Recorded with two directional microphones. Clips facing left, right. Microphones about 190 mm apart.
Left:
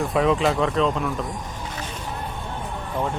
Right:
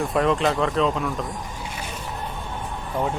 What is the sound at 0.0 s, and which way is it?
Speech, centre (ahead or behind).